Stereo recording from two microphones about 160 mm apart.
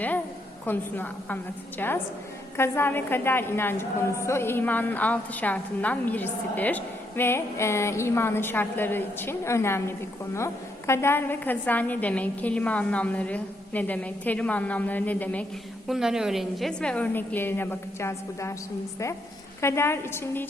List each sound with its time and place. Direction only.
0.6 s a woman's voice: 10° left (ahead or behind)
15.9 s a woman's voice: 5° right (ahead or behind); by 18.5 s 20° left (ahead or behind)
19.6 s a woman's voice: 15° left (ahead or behind)